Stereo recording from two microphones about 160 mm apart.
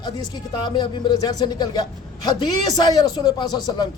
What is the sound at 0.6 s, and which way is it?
Speech, 30° left (ahead or behind).